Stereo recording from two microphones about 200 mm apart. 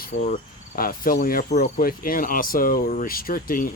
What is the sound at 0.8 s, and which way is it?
Speech, 45° left (ahead or behind).